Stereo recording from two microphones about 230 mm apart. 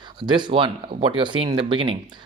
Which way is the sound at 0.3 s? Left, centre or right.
Centre.